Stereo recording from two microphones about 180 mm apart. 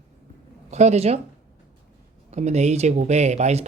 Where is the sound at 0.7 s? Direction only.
40° right (ahead or behind).